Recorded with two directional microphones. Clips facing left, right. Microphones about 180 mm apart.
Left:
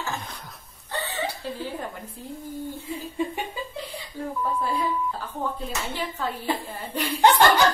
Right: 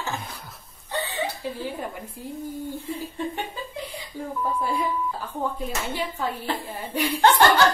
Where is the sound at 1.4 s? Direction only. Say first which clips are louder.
Right 2 dB; 15° right (ahead or behind).